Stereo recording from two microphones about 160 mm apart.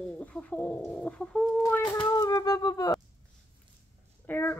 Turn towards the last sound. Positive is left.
turn(degrees=10)  # may be behind; listen again after turning